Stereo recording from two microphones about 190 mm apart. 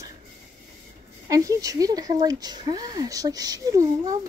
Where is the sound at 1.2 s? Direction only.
15° right (ahead or behind).